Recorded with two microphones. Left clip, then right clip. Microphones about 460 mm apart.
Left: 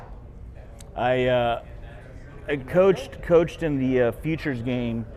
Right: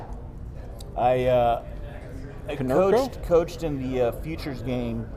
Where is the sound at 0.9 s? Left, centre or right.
Left.